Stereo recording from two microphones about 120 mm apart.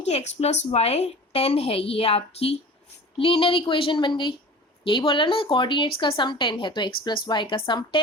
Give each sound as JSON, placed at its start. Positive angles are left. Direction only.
{"t": 0.0, "sound": "a woman's voice", "side_deg": 65}